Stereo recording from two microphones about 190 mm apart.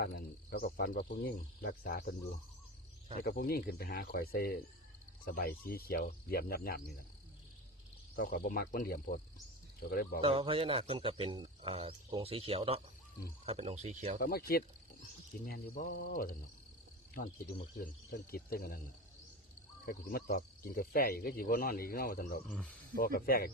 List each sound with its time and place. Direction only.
0.0 s speech: 55° left (ahead or behind)
3.2 s speech: 50° left (ahead or behind)
8.1 s speech: 50° left (ahead or behind)
10.2 s speech: 30° right (ahead or behind)
14.2 s speech: 50° left (ahead or behind)
19.8 s speech: 50° left (ahead or behind)
22.4 s speech: 5° left (ahead or behind)
23.0 s speech: 50° left (ahead or behind)